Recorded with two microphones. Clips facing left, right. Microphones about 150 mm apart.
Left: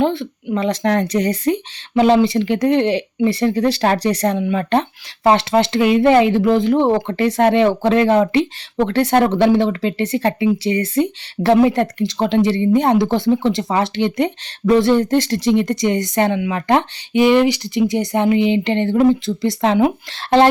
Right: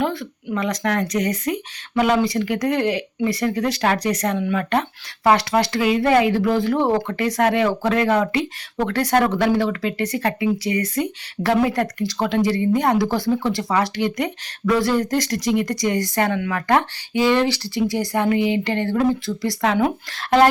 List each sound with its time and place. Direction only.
0.0 s speech: 25° left (ahead or behind)